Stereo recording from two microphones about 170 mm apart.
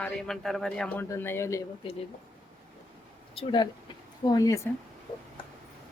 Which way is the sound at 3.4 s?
25° left (ahead or behind).